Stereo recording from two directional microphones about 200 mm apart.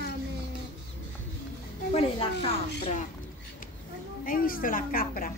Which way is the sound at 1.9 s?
25° left (ahead or behind).